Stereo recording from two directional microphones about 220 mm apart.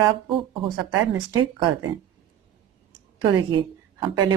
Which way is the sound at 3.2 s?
25° right (ahead or behind).